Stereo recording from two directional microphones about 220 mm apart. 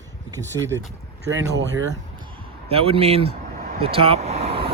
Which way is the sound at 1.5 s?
55° right (ahead or behind).